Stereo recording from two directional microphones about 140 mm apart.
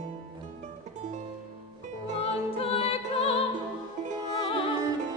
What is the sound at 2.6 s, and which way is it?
Music, 45° left (ahead or behind).